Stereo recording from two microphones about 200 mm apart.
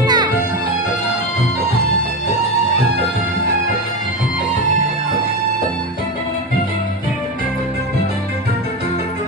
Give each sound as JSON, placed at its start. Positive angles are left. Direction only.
{"t": 0.0, "sound": "music", "side_deg": -20}